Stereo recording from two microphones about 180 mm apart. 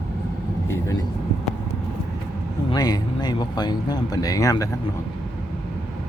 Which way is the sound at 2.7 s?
20° left (ahead or behind).